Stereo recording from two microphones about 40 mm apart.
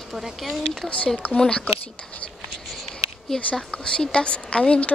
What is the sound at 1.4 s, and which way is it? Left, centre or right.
Speech, left.